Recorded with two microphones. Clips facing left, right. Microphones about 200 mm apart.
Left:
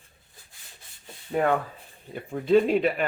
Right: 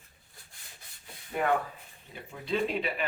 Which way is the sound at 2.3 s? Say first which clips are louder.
Left 10 dB; 50° left (ahead or behind).